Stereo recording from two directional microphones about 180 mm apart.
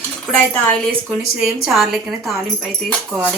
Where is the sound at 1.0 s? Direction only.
5° right (ahead or behind).